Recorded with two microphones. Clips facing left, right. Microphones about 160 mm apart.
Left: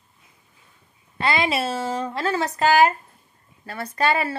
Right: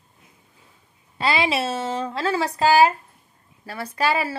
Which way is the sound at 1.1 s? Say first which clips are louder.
Even; 10° right (ahead or behind).